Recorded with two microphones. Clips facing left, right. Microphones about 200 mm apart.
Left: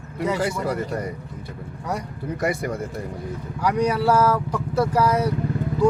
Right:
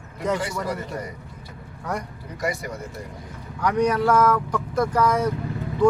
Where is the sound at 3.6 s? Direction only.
10° left (ahead or behind).